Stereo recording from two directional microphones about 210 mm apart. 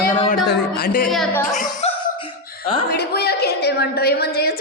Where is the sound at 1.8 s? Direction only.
30° left (ahead or behind).